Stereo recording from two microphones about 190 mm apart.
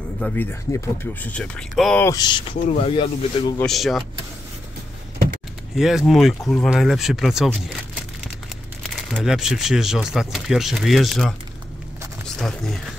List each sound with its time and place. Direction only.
0.2 s speech: 10° left (ahead or behind)
2.0 s speech: 20° left (ahead or behind)
3.5 s speech: centre (ahead or behind)
5.8 s speech: centre (ahead or behind)
12.4 s speech: centre (ahead or behind)